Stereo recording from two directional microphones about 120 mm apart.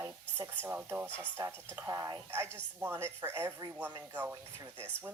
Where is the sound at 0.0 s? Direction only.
25° right (ahead or behind).